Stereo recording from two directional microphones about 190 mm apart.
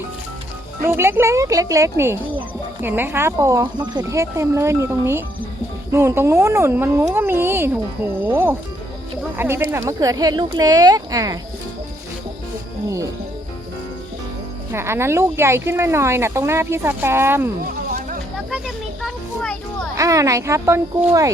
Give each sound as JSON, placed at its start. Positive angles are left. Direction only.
{"t": 0.9, "sound": "speech", "side_deg": -15}
{"t": 14.7, "sound": "speech", "side_deg": -15}
{"t": 19.0, "sound": "children playing", "side_deg": 5}
{"t": 20.0, "sound": "speech", "side_deg": -15}